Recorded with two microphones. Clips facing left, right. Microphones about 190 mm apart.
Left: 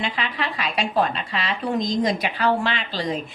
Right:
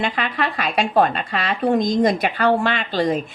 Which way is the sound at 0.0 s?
50° right (ahead or behind).